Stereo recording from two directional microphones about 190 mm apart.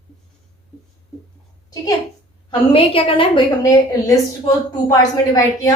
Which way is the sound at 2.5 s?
30° left (ahead or behind).